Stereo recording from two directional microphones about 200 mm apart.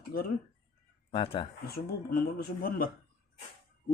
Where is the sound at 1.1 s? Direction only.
25° left (ahead or behind).